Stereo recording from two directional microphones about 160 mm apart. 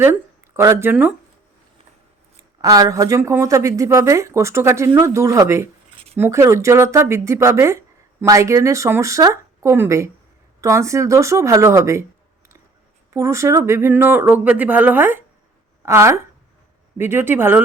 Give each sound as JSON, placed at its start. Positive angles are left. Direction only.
{"t": 0.0, "sound": "speech", "side_deg": -15}
{"t": 2.6, "sound": "speech", "side_deg": -20}
{"t": 13.1, "sound": "speech", "side_deg": -20}